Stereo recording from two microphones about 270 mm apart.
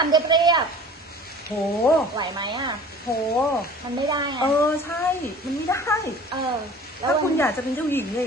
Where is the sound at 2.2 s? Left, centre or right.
Centre.